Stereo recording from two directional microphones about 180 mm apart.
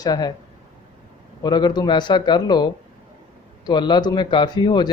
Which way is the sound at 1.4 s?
25° left (ahead or behind).